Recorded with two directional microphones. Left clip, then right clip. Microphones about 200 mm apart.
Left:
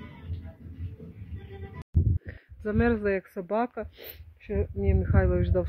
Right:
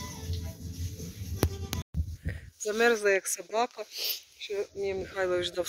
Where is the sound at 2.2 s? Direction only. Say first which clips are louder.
Right 4 dB; 5° right (ahead or behind).